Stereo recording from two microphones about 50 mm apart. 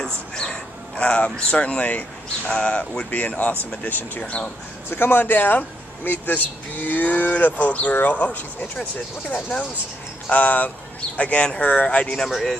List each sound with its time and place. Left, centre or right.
0.0 s a sound: centre
1.5 s speech: left
3.1 s speech: left
3.8 s speech: left
4.2 s speech: left
4.9 s speech: left